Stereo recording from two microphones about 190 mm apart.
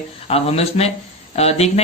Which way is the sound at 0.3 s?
30° left (ahead or behind).